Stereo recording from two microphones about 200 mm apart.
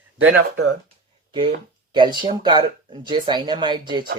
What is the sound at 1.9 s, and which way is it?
Speech, 25° right (ahead or behind).